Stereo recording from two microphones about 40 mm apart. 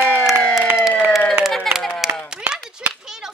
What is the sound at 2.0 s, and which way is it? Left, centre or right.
Clapping, centre.